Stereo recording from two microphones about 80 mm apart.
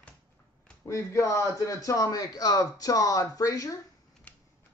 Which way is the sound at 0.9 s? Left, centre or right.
Left.